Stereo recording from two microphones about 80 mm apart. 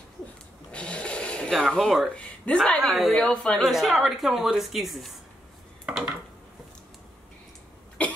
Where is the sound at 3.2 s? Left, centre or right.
Centre.